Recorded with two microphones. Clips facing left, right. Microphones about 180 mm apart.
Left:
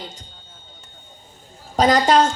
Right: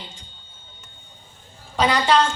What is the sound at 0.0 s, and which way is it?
Speech, 40° left (ahead or behind).